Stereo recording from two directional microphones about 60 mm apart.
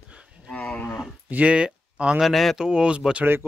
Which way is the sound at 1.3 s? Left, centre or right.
Right.